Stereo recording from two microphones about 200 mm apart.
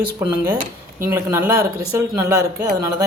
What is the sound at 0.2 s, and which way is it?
Speech, 10° right (ahead or behind).